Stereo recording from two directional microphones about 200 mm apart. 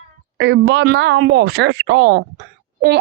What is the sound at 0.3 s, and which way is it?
Speech, 65° right (ahead or behind).